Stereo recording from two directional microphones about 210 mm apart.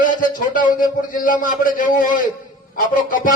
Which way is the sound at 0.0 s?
40° left (ahead or behind).